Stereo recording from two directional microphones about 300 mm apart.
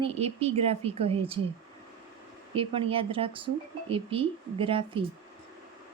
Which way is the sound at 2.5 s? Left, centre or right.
Centre.